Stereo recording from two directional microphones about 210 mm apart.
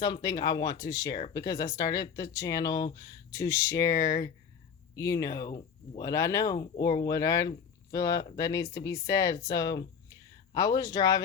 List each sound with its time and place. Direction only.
0.0 s speech: 20° left (ahead or behind)